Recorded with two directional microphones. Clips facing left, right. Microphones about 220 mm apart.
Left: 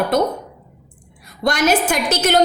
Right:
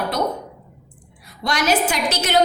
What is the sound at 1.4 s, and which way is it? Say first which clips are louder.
Speech: left 3 dB; 50° left (ahead or behind).